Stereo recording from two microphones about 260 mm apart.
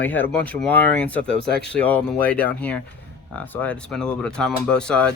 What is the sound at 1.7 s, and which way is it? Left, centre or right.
Speech, centre.